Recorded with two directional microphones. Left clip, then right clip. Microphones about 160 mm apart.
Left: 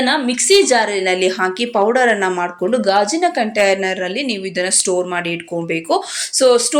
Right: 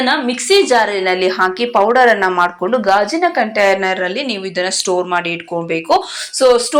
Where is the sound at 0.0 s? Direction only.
15° left (ahead or behind).